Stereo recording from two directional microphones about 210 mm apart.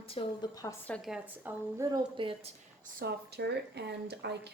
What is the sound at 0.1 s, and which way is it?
A woman's voice, 25° left (ahead or behind).